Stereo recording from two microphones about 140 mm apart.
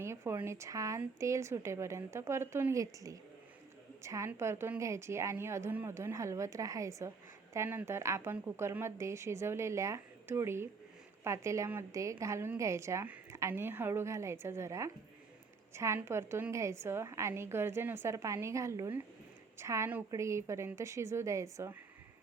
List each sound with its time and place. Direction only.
0.0 s a woman's voice: 20° right (ahead or behind)